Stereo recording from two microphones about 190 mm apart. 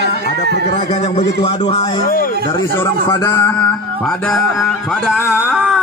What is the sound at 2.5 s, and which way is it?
A man's voice, 15° left (ahead or behind).